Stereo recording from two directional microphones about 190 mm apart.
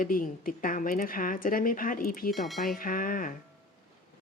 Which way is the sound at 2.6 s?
50° left (ahead or behind).